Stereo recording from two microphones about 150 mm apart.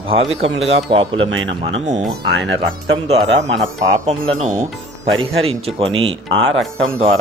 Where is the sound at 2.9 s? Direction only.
40° right (ahead or behind).